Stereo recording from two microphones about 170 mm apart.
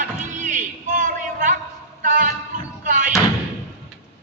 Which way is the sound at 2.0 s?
55° right (ahead or behind).